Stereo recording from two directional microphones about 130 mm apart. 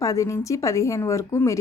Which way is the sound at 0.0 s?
25° left (ahead or behind).